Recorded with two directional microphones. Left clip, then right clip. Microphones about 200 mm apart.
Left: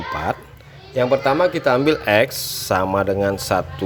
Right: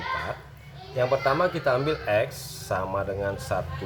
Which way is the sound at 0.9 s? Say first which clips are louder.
Left 6 dB; 35° left (ahead or behind).